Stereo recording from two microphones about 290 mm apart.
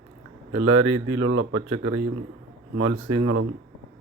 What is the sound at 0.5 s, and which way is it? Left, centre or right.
Speech, right.